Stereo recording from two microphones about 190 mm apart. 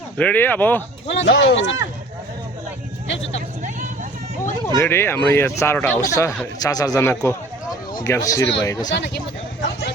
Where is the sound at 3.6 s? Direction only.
40° right (ahead or behind).